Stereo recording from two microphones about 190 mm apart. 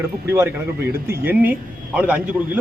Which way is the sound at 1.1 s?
10° right (ahead or behind).